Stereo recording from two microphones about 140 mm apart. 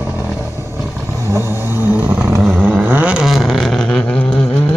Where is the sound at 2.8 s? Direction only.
10° right (ahead or behind); by 4.7 s 10° left (ahead or behind).